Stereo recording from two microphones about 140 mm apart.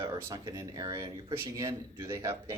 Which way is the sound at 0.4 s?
25° right (ahead or behind).